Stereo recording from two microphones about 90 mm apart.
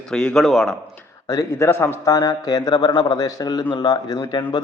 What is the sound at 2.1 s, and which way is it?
A man's voice, 45° left (ahead or behind).